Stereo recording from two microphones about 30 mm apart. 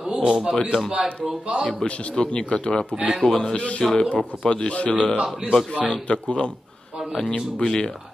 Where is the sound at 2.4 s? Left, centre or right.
Left.